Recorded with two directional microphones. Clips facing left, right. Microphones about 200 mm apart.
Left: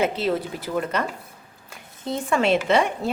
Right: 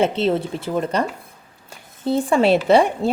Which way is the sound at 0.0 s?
25° right (ahead or behind).